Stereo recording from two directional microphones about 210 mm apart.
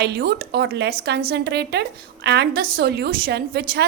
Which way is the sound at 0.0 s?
50° right (ahead or behind).